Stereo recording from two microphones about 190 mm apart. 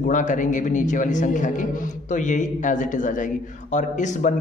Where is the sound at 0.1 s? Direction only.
40° left (ahead or behind).